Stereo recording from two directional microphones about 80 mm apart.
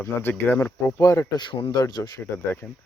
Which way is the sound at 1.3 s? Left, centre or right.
Left.